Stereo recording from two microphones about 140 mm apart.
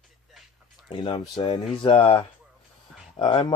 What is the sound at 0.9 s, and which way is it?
Speech, 30° left (ahead or behind).